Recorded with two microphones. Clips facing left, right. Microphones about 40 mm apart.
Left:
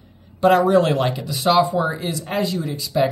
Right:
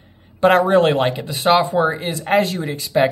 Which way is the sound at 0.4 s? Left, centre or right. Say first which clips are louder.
Right 2 dB; right.